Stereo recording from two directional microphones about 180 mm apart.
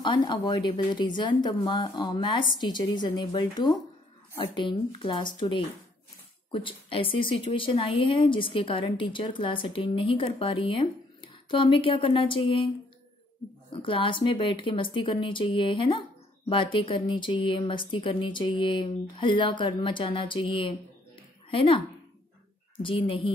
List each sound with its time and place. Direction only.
0.0 s a woman's voice: 25° left (ahead or behind)
13.7 s a woman's voice: 30° left (ahead or behind)